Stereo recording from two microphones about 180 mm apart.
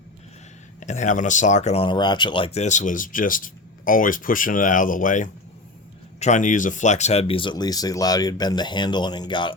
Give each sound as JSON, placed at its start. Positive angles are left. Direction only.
{"t": 0.8, "sound": "speech", "side_deg": 40}